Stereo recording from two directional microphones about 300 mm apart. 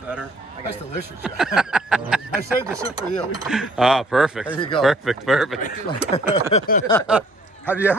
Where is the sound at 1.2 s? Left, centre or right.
Centre.